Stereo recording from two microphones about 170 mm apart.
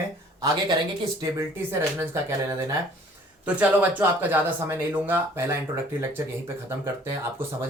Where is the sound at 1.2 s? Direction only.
20° right (ahead or behind).